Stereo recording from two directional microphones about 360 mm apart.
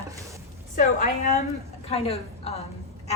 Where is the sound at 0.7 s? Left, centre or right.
Centre.